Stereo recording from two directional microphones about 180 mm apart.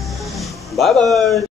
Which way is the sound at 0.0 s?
Centre (ahead or behind).